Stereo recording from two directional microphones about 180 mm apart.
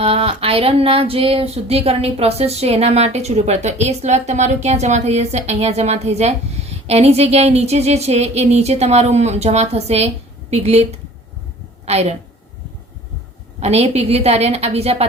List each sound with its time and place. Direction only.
0.0 s a woman's voice: 30° right (ahead or behind)
13.6 s speech: 35° right (ahead or behind)